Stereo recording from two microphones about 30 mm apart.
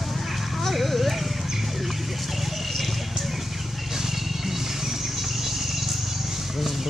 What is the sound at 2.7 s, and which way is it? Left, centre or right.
Vehicle, centre.